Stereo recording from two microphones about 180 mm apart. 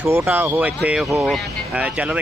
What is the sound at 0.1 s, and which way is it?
Speech, 10° right (ahead or behind).